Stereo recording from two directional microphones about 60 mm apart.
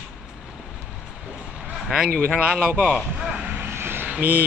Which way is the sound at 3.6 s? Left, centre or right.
Right.